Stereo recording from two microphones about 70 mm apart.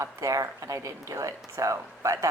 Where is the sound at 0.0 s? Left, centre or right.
Right.